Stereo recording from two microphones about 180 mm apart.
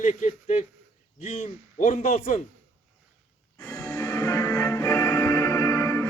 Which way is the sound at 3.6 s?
10° left (ahead or behind).